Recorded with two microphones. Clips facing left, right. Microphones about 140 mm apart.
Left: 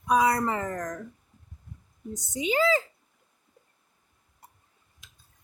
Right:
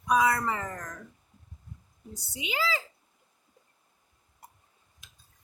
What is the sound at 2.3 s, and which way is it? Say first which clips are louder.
Speech: left 8 dB; 45° left (ahead or behind).